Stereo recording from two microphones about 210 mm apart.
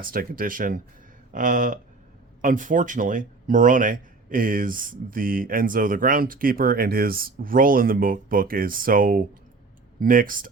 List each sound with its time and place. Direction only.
0.0 s speech: 45° right (ahead or behind)